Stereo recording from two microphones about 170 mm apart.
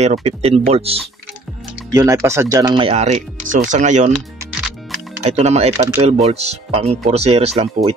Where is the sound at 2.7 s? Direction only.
35° right (ahead or behind).